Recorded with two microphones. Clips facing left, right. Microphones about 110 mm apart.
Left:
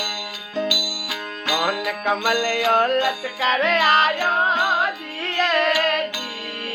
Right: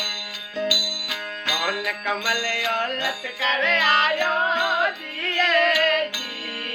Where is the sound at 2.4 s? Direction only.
35° left (ahead or behind).